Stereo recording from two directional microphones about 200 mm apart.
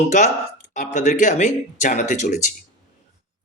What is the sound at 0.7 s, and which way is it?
Speech, 40° left (ahead or behind).